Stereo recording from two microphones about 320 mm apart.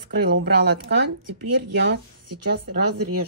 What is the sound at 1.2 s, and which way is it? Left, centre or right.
Speech, right.